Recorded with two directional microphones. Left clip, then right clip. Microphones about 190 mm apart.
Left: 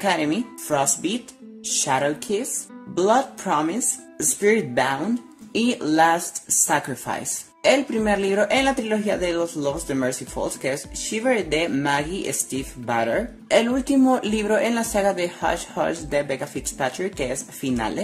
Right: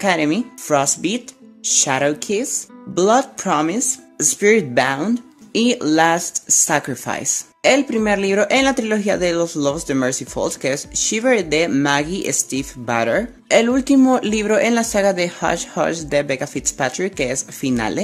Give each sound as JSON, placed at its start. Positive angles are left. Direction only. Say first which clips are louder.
{"t": 0.0, "sound": "speech", "louder": "right 4 dB", "side_deg": -40}